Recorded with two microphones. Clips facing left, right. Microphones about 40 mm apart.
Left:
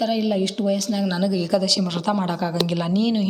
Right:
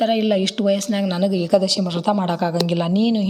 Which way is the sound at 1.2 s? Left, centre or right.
Centre.